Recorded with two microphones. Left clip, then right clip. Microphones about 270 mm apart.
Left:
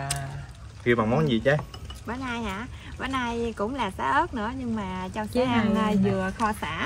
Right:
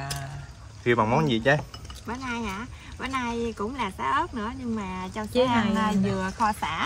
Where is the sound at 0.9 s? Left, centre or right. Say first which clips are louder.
Right 1 dB; right.